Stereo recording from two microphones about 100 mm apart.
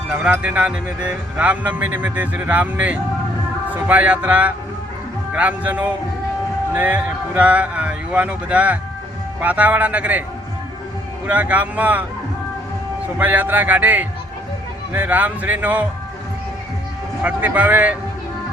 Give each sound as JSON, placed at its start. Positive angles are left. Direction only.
{"t": 0.2, "sound": "speech", "side_deg": -10}
{"t": 11.3, "sound": "speech", "side_deg": -15}
{"t": 13.1, "sound": "speech", "side_deg": -15}
{"t": 17.2, "sound": "speech", "side_deg": -15}